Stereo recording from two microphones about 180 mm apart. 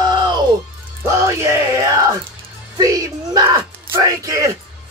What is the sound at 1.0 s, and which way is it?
Music, 15° right (ahead or behind).